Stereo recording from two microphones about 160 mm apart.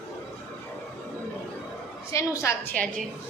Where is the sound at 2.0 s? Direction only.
20° left (ahead or behind).